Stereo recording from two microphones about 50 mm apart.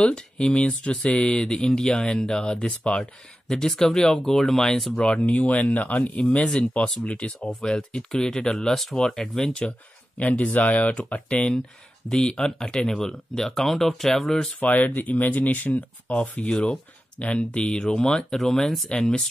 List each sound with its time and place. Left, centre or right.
0.0 s speech: centre
3.4 s speech: centre
5.0 s speech: left; by 14.5 s centre
14.6 s speech: left
16.2 s speech: left; by 18.9 s centre